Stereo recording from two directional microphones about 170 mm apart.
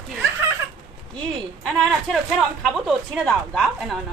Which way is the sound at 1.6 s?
Centre (ahead or behind).